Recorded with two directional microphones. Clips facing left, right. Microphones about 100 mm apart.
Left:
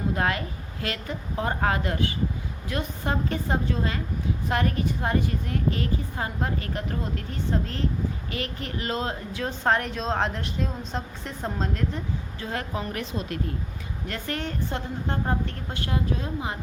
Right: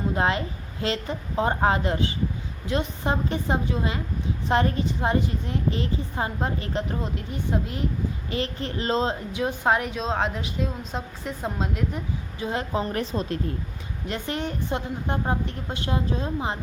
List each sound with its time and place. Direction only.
0.1 s a woman's voice: 25° right (ahead or behind)
8.3 s a woman's voice: 30° right (ahead or behind)
14.1 s a woman's voice: 20° right (ahead or behind)